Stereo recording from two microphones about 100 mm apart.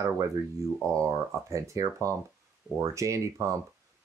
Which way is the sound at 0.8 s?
30° right (ahead or behind).